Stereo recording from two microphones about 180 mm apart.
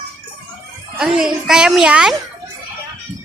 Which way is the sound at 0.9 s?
5° right (ahead or behind).